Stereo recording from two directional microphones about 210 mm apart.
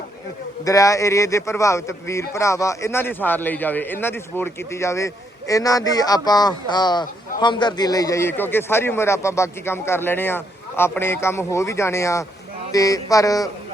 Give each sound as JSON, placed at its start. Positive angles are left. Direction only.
{"t": 0.6, "sound": "speech", "side_deg": 15}